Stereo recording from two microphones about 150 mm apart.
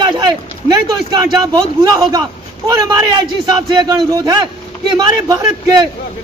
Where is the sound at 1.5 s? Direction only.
25° right (ahead or behind).